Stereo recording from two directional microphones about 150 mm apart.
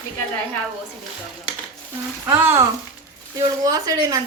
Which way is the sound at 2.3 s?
15° right (ahead or behind).